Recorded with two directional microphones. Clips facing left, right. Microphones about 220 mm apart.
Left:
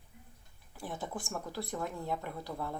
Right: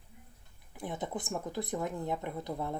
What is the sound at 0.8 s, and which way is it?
Speech, 20° right (ahead or behind).